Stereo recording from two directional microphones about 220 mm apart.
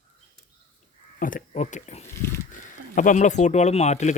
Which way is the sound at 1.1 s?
40° left (ahead or behind).